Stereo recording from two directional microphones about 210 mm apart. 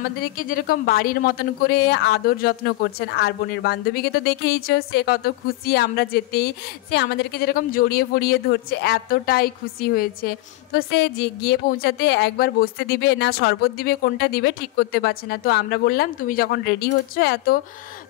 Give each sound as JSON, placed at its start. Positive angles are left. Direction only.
{"t": 0.2, "sound": "speech", "side_deg": 40}